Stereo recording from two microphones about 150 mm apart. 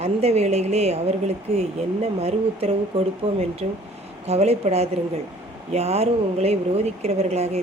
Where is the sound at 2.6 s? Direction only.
40° right (ahead or behind).